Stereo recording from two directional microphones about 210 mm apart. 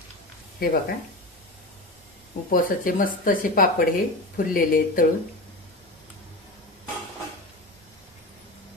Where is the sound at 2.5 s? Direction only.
40° left (ahead or behind).